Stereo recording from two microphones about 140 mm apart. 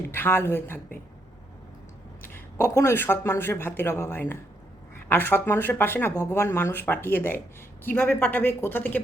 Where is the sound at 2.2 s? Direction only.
15° left (ahead or behind).